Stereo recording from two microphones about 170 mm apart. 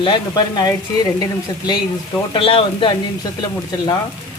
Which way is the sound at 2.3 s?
30° left (ahead or behind).